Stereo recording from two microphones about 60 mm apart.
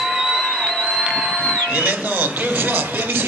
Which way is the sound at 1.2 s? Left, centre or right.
Centre.